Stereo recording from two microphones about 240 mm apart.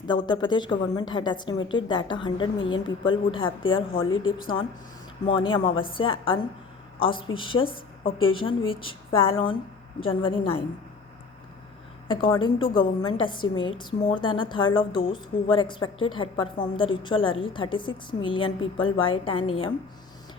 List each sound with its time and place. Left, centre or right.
0.1 s a woman's voice: centre
12.0 s a woman's voice: centre